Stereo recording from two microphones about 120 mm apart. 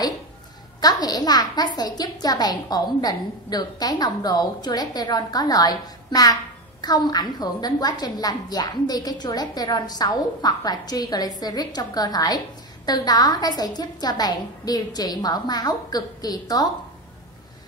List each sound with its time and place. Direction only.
0.7 s a woman's voice: 35° left (ahead or behind)